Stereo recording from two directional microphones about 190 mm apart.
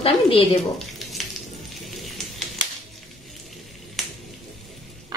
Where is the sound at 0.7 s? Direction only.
Centre (ahead or behind).